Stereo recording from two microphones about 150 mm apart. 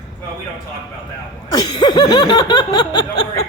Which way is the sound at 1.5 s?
30° left (ahead or behind).